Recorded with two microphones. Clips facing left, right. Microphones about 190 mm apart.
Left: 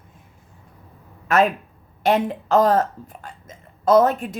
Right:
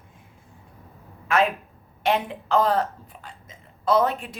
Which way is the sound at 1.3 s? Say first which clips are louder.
Left 4 dB; 40° left (ahead or behind).